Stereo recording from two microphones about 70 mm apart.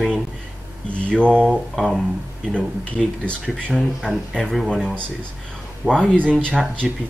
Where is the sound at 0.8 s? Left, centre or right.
Centre.